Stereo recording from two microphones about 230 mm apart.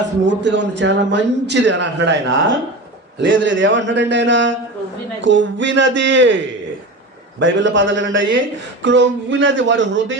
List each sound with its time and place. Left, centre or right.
0.3 s a man's voice: right
3.2 s a man's voice: right